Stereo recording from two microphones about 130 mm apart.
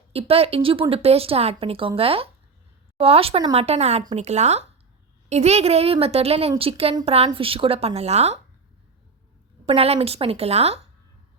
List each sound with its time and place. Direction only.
0.1 s a woman's voice: 50° right (ahead or behind)
9.6 s a woman's voice: 50° right (ahead or behind)